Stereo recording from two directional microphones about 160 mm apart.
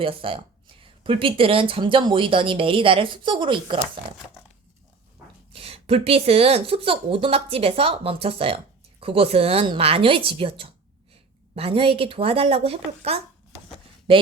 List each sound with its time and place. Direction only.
0.0 s speech: 35° right (ahead or behind)
5.5 s speech: 40° right (ahead or behind)